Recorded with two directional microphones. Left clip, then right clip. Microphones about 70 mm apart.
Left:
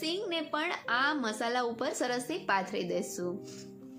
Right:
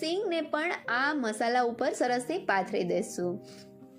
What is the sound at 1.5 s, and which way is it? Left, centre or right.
A woman's voice, right.